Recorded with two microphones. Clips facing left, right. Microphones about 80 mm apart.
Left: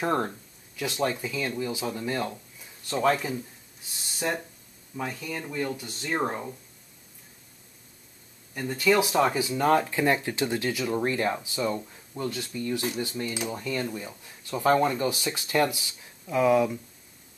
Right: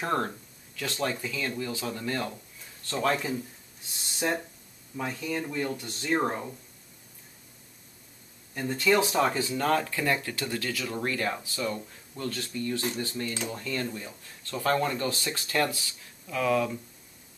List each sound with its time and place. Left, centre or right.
0.0 s speech: centre
4.1 s speech: centre
8.5 s speech: centre